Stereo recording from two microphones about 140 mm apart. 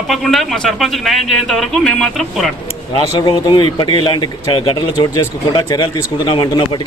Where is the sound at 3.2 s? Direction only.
30° left (ahead or behind).